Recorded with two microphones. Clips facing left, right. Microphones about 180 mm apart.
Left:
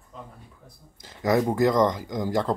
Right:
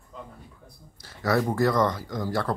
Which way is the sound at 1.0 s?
15° left (ahead or behind).